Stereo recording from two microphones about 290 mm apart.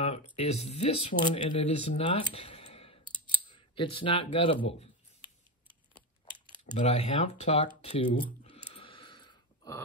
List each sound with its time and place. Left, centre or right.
0.4 s speech: left
2.3 s a sound: centre
3.4 s speech: centre
6.7 s typing: centre